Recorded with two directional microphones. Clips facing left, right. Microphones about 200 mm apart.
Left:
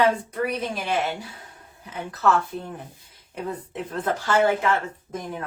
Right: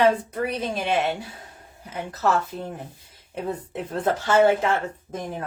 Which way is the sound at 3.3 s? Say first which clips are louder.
Right 2 dB; 30° right (ahead or behind).